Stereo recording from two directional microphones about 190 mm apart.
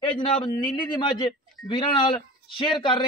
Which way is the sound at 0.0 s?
25° left (ahead or behind).